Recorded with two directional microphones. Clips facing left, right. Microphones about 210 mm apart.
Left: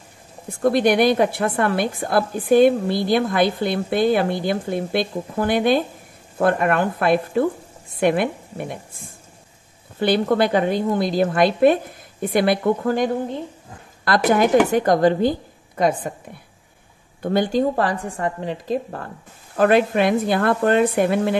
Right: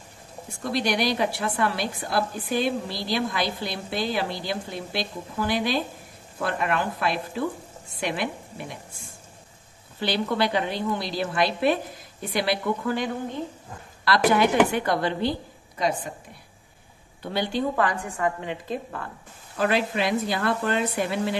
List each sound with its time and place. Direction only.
0.5 s a woman's voice: 55° left (ahead or behind)
9.9 s a woman's voice: 50° left (ahead or behind)
17.2 s a woman's voice: 50° left (ahead or behind)